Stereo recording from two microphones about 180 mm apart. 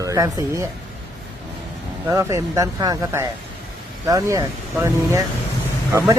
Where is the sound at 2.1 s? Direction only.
20° right (ahead or behind).